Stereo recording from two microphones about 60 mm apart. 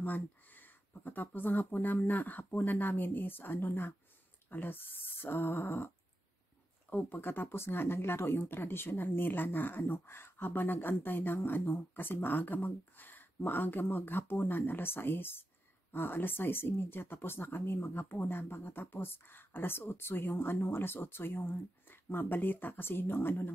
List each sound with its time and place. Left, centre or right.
0.0 s speech: left
6.9 s speech: left